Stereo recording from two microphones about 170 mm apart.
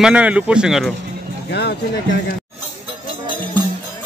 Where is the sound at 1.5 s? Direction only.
80° left.